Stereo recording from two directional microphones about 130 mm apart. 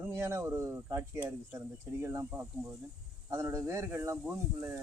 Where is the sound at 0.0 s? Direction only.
20° right (ahead or behind).